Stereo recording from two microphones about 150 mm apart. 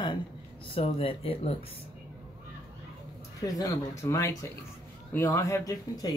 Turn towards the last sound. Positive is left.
turn(degrees=25)  # may be behind; listen again after turning